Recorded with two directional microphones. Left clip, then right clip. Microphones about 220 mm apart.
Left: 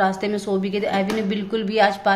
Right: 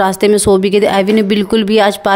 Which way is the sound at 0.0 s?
50° right (ahead or behind).